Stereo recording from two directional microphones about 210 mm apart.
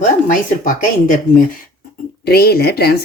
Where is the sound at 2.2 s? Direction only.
50° left (ahead or behind).